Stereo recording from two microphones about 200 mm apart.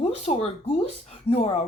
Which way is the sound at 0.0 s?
30° left (ahead or behind).